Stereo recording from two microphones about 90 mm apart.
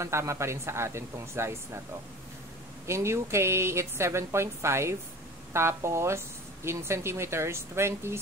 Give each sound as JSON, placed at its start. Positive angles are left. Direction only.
{"t": 0.0, "sound": "speech", "side_deg": -35}
{"t": 2.9, "sound": "speech", "side_deg": -30}